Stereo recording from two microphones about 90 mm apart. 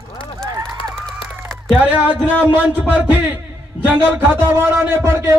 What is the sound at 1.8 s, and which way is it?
Speech, 20° right (ahead or behind).